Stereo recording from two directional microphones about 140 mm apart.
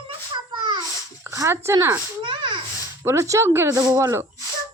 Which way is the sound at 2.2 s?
35° right (ahead or behind).